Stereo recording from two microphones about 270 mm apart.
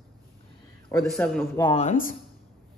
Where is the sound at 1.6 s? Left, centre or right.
Left.